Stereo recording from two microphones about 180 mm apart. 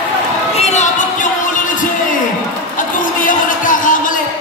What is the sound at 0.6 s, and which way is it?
Music, 40° left (ahead or behind).